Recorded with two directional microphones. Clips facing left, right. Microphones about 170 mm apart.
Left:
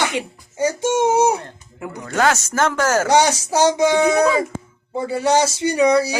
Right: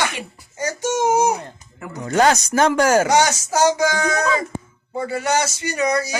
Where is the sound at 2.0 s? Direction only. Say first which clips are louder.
Right 2 dB; 20° right (ahead or behind).